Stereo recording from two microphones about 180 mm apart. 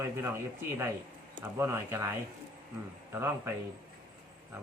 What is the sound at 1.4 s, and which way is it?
Speech, 15° right (ahead or behind).